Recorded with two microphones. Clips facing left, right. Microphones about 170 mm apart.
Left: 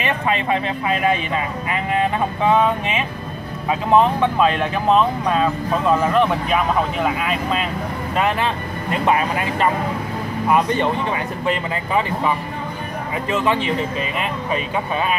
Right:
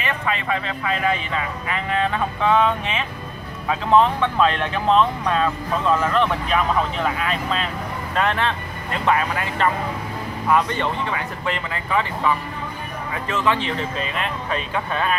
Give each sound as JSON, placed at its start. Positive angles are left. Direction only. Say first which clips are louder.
{"t": 0.0, "sound": "speech", "louder": "left 4 dB", "side_deg": 20}
{"t": 13.3, "sound": "speech", "louder": "left 2 dB", "side_deg": 15}